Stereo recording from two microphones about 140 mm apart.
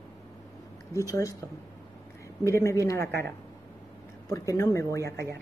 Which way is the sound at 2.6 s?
20° left (ahead or behind).